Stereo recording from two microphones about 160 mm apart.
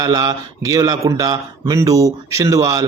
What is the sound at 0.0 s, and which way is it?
Speech, 25° right (ahead or behind).